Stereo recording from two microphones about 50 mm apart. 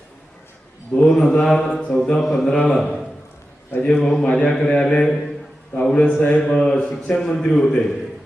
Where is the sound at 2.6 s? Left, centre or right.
Centre.